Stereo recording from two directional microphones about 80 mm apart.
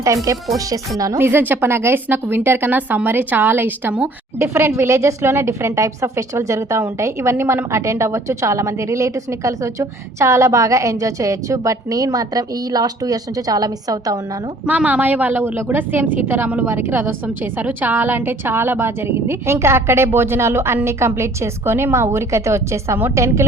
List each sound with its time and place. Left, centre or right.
0.3 s a woman's voice: right
1.2 s a woman's voice: right
14.6 s a woman's voice: centre; by 23.5 s right